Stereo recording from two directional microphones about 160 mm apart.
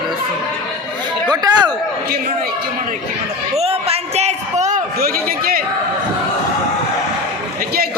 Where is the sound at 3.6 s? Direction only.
40° right (ahead or behind).